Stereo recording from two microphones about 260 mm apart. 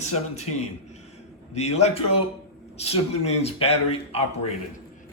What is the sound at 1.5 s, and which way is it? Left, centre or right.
A man's voice, left.